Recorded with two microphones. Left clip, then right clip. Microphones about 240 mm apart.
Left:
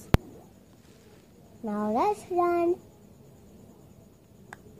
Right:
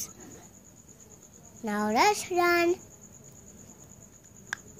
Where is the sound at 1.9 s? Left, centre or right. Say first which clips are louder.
Right 2 dB; centre.